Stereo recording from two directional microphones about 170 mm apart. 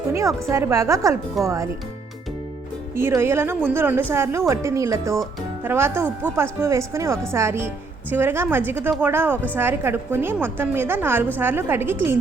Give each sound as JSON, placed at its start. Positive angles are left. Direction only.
{"t": 0.1, "sound": "a woman's voice", "side_deg": -15}
{"t": 2.9, "sound": "a woman's voice", "side_deg": -15}